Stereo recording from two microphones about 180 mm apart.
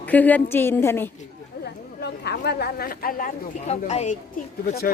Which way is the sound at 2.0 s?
65° left (ahead or behind).